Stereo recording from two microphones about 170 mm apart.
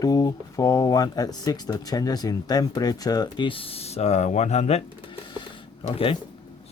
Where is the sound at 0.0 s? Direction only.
20° left (ahead or behind); by 4.8 s 40° left (ahead or behind).